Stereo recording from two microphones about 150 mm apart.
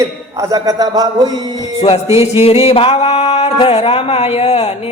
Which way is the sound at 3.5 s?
40° left (ahead or behind).